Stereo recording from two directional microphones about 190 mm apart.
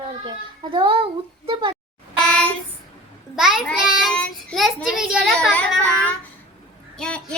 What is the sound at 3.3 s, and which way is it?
A child's voice, centre (ahead or behind).